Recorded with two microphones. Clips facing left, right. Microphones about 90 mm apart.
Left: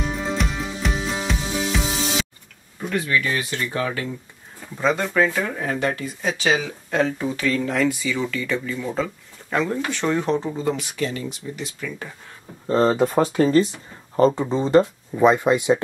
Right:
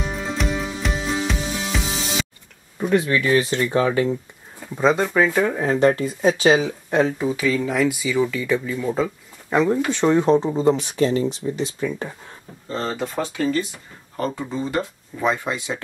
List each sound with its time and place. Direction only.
0.0 s music: centre (ahead or behind)
2.9 s speech: 30° right (ahead or behind)
6.9 s speech: 20° right (ahead or behind)
12.6 s speech: 45° left (ahead or behind)
13.4 s speech: 35° left (ahead or behind)
15.1 s speech: 20° left (ahead or behind)